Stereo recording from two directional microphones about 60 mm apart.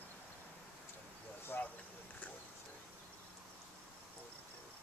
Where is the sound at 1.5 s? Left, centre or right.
Left.